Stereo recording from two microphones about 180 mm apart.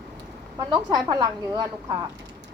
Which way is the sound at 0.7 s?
25° right (ahead or behind).